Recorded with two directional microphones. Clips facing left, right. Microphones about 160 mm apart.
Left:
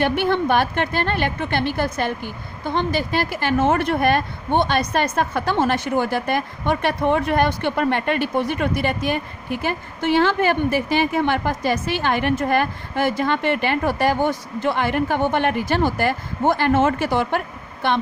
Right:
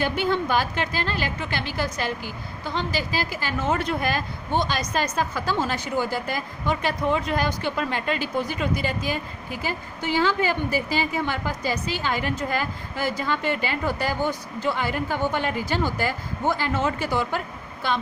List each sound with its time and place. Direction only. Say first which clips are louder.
0.0 s a woman's voice: left 4 dB; 60° left (ahead or behind)